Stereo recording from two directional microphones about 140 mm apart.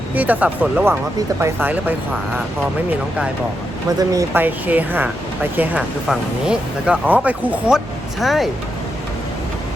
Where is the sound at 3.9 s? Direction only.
25° right (ahead or behind).